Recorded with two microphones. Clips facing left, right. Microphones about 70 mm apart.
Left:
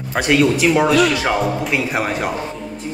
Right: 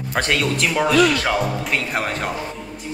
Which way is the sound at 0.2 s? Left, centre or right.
Centre.